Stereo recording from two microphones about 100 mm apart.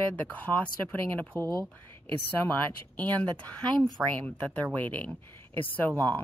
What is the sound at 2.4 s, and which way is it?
Speech, 20° left (ahead or behind).